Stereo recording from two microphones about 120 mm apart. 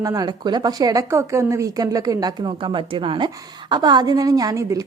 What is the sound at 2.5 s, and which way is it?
A woman's voice, 45° right (ahead or behind).